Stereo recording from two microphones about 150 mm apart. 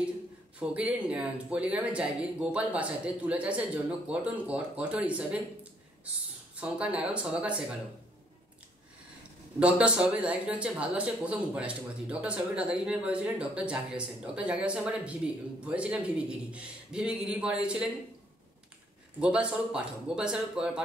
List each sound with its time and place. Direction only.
0.6 s speech: 10° right (ahead or behind)
9.6 s speech: 10° right (ahead or behind)
19.1 s speech: 5° right (ahead or behind)